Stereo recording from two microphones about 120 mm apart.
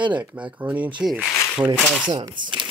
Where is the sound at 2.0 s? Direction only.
40° right (ahead or behind).